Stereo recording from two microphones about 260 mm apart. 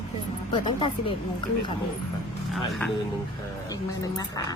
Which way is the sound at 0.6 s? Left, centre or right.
Centre.